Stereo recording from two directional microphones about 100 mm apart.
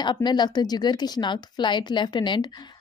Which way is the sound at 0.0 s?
50° left (ahead or behind).